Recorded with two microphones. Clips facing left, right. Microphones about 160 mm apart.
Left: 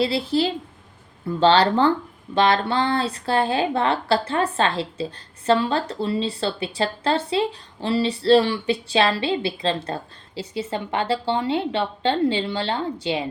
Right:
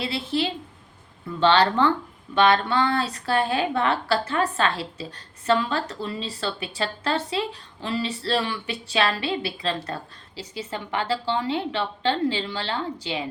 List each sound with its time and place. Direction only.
0.0 s a woman's voice: 35° left (ahead or behind)